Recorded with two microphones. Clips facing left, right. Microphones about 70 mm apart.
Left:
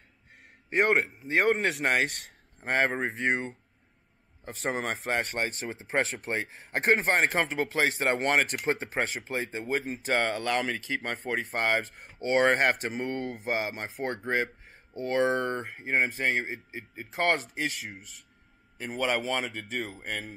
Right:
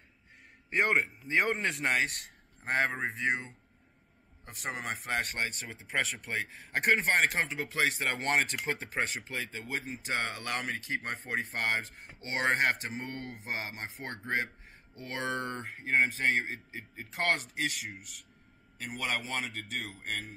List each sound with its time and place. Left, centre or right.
0.7 s a man's voice: left
4.5 s speech: left
11.5 s speech: left
13.2 s speech: left